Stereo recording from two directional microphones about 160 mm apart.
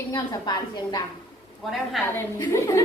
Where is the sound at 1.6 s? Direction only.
Centre (ahead or behind).